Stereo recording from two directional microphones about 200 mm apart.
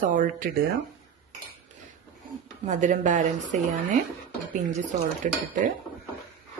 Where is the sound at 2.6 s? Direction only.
40° right (ahead or behind).